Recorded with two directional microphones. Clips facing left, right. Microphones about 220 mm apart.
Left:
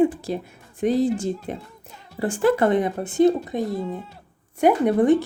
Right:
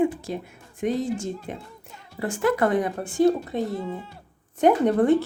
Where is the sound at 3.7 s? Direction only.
Centre (ahead or behind).